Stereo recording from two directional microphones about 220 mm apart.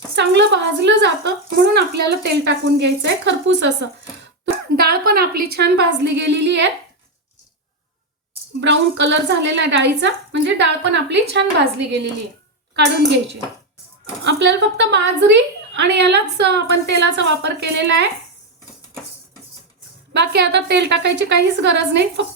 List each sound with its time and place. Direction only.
0.2 s a woman's voice: 55° right (ahead or behind)
8.6 s a woman's voice: 55° right (ahead or behind)
14.3 s a woman's voice: 55° right (ahead or behind)
20.1 s a woman's voice: 50° right (ahead or behind)